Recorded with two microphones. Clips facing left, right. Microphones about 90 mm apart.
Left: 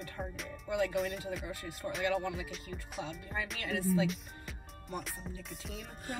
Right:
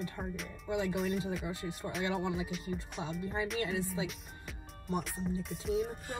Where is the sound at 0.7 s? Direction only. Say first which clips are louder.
Left 1 dB; 25° right (ahead or behind).